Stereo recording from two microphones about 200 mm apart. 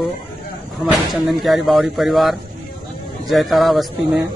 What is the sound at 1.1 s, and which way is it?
Speech, centre (ahead or behind).